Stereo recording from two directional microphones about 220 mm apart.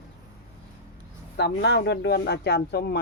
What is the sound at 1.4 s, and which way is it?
Speech, 50° left (ahead or behind).